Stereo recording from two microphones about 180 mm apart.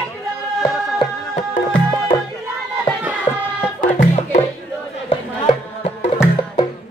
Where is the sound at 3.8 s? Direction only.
40° left (ahead or behind).